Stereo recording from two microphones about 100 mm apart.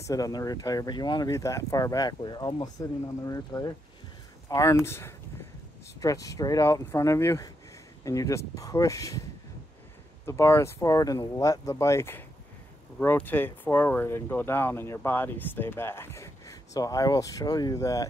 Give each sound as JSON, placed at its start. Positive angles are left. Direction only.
{"t": 0.0, "sound": "speech", "side_deg": 35}
{"t": 1.3, "sound": "speech", "side_deg": 35}
{"t": 10.2, "sound": "speech", "side_deg": 25}